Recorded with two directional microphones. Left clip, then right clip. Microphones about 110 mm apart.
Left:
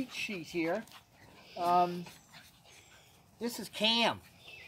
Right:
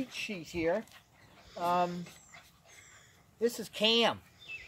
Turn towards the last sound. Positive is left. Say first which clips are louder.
# right 2 dB
turn(degrees=-15)  # may be behind; listen again after turning